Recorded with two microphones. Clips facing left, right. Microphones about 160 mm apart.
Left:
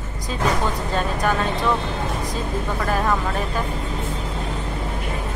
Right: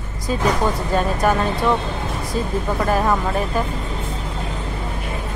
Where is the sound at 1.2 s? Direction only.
10° right (ahead or behind).